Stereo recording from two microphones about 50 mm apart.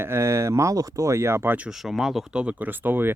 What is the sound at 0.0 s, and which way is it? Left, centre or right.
Speech, right.